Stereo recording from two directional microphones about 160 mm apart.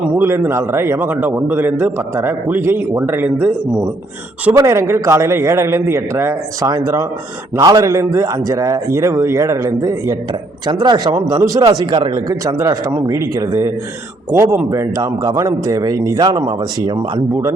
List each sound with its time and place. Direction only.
0.2 s a man's voice: 15° right (ahead or behind); by 17.0 s 35° right (ahead or behind)